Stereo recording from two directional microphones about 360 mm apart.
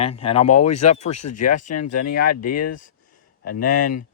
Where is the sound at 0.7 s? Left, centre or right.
Left.